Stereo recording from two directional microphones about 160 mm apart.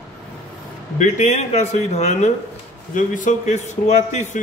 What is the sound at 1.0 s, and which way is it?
A man's voice, 45° left (ahead or behind).